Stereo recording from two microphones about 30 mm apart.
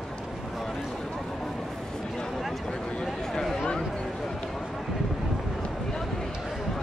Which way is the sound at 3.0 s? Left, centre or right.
Centre.